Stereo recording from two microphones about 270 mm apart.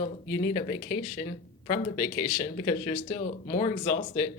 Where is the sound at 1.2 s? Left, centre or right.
Centre.